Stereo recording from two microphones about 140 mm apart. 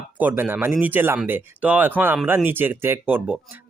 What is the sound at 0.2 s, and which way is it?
Speech, 10° right (ahead or behind).